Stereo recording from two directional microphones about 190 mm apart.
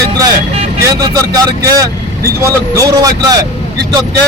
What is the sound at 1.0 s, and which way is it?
Speech, 20° right (ahead or behind).